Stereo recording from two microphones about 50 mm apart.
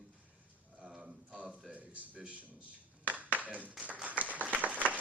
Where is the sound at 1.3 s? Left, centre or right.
Right.